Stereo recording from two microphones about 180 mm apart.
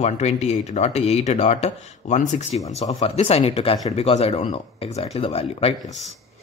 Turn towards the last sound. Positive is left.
turn(degrees=35)  # may be behind; listen again after turning